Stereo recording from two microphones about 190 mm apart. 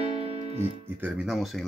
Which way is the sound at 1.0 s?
5° right (ahead or behind).